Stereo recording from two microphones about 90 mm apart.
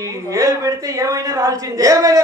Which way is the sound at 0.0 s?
40° right (ahead or behind).